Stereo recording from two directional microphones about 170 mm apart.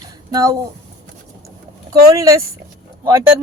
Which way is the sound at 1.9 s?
20° right (ahead or behind).